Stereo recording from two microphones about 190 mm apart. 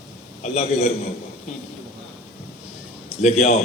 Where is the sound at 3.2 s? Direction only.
35° left (ahead or behind).